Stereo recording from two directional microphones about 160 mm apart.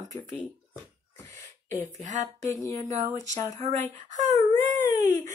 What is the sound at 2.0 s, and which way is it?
Speech, 50° right (ahead or behind).